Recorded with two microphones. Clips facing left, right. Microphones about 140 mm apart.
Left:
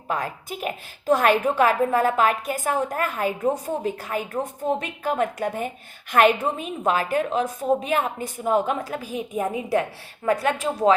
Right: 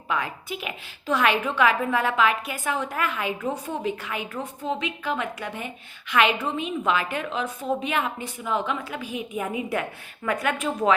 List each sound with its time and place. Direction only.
0.1 s a woman's voice: 40° left (ahead or behind)